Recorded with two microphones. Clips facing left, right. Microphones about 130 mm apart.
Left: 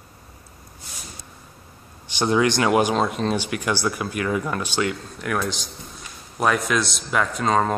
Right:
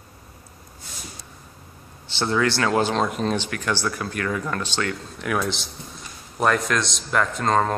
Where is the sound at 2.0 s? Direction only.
15° left (ahead or behind).